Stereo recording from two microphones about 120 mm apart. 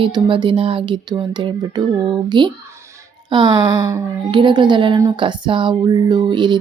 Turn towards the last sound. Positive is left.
turn(degrees=-40)  # may be behind; listen again after turning